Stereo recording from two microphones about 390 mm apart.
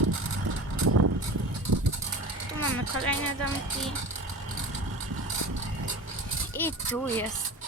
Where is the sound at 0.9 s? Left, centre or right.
Right.